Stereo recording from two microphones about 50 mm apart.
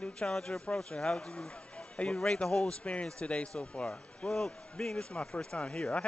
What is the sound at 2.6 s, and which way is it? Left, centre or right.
A man's voice, left.